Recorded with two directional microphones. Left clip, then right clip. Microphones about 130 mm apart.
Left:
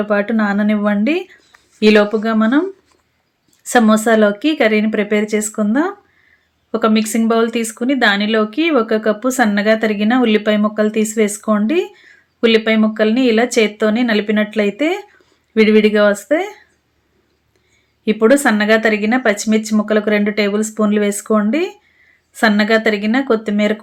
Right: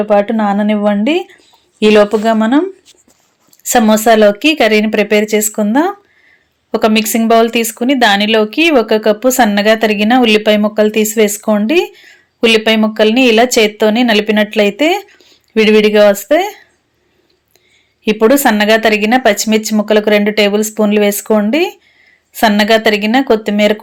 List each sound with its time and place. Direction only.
0.0 s speech: 25° right (ahead or behind)
1.8 s speech: 40° right (ahead or behind); by 16.6 s 25° right (ahead or behind)
18.0 s speech: 25° right (ahead or behind)